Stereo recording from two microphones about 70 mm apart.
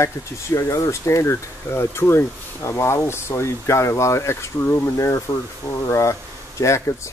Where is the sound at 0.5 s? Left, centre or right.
Left.